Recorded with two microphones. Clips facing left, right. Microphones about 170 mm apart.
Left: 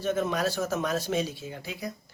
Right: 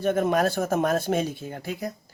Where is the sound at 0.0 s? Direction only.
55° right (ahead or behind).